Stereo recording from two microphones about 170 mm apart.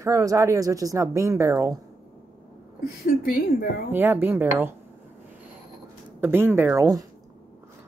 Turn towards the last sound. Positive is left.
turn(degrees=-20)  # may be behind; listen again after turning